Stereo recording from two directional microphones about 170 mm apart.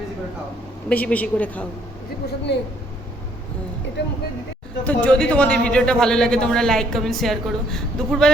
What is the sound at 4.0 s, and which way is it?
Speech, 85° left.